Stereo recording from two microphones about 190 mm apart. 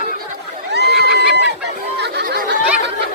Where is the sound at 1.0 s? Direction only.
60° right (ahead or behind).